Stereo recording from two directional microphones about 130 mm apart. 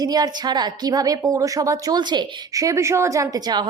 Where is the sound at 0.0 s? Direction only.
30° right (ahead or behind).